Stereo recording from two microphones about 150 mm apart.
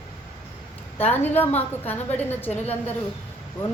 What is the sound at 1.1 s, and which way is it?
A woman's voice, 15° left (ahead or behind).